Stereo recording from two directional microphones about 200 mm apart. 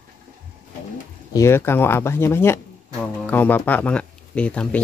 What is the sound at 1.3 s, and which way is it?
Speech, 10° left (ahead or behind).